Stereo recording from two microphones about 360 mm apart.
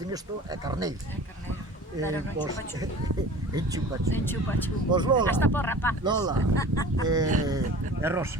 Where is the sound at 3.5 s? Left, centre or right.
Centre.